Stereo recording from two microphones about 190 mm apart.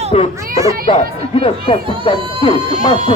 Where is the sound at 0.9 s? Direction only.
30° left (ahead or behind).